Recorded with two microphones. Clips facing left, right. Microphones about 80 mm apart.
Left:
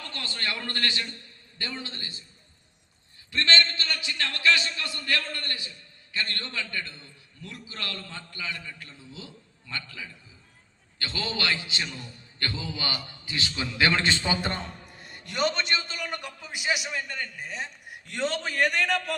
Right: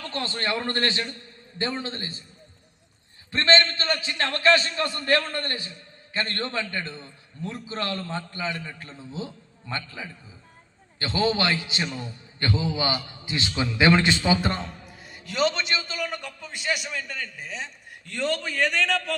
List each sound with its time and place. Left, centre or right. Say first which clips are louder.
0.0 s a man's voice: right 5 dB; right
3.3 s a man's voice: right 4 dB; right; by 17.7 s centre
17.8 s a man's voice: right 3 dB; centre